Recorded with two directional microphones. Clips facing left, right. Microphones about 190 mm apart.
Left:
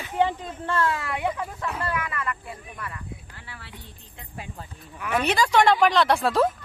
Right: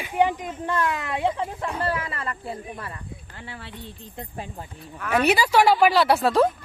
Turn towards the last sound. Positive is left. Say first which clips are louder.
# right 2 dB
turn(degrees=0)  # may be behind; listen again after turning